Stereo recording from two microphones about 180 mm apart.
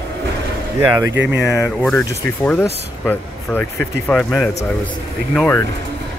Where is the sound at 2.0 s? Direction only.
15° left (ahead or behind).